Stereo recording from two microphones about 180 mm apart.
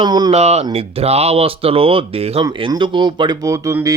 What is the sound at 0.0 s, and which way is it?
Speech, 25° right (ahead or behind).